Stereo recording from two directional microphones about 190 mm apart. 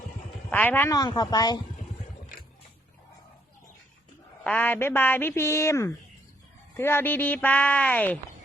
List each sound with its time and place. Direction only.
0.5 s a woman's voice: 10° left (ahead or behind)
4.4 s speech: 10° left (ahead or behind)